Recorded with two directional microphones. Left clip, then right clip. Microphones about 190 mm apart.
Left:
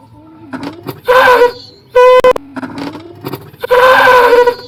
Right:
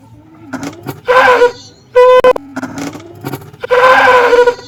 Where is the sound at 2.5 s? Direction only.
10° right (ahead or behind).